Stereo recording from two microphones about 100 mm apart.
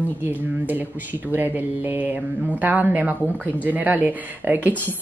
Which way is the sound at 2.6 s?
15° right (ahead or behind).